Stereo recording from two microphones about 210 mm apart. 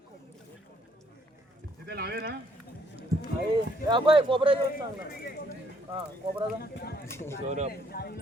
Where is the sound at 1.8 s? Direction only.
50° right (ahead or behind).